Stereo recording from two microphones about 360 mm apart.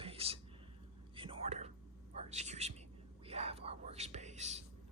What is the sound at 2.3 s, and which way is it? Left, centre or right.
Speech, centre.